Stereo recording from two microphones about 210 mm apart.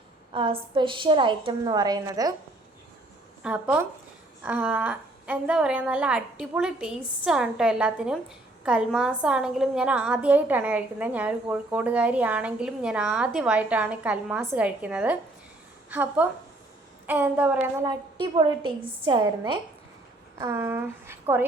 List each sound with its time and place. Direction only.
0.3 s a woman's voice: 25° right (ahead or behind)
3.4 s a woman's voice: 5° right (ahead or behind)
17.8 s a woman's voice: 20° right (ahead or behind)
20.4 s speech: 10° right (ahead or behind)